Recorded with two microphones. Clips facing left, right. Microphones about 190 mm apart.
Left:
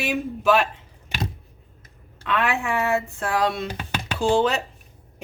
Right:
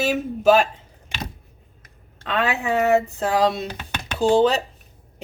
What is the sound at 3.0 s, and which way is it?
Speech, 35° right (ahead or behind).